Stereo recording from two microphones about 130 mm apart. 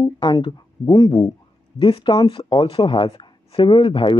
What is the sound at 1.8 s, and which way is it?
Speech, 40° left (ahead or behind).